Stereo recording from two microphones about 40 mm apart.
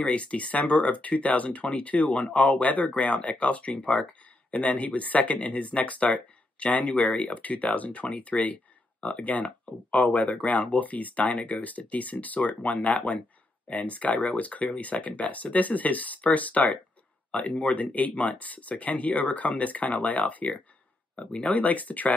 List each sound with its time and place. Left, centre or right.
0.0 s speech: left